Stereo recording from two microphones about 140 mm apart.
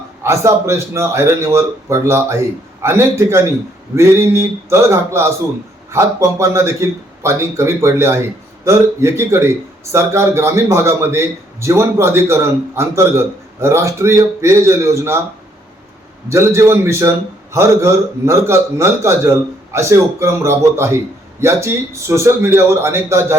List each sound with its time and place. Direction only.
0.2 s a man's voice: 20° right (ahead or behind)
16.3 s a man's voice: 20° right (ahead or behind)